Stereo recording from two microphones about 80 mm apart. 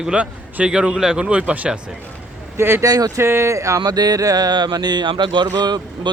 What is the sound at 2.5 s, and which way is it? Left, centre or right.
Speech, right.